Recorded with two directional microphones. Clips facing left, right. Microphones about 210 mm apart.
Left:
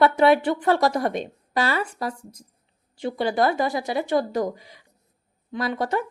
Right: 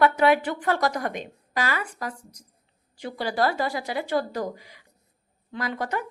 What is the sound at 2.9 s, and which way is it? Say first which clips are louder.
A woman's voice: left 5 dB; 20° left (ahead or behind).